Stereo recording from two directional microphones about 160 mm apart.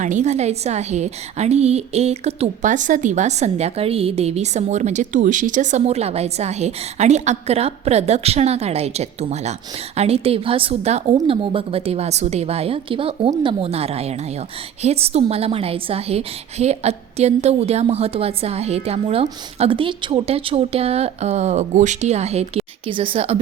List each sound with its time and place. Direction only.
0.0 s a woman's voice: 50° right (ahead or behind)